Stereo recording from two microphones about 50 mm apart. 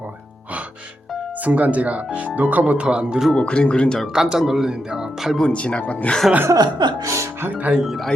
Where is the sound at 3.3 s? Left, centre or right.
Left.